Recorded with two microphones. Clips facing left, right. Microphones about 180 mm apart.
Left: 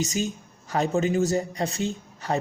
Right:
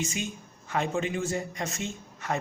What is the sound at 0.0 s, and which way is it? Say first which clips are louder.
Speech: left 6 dB; 40° left (ahead or behind).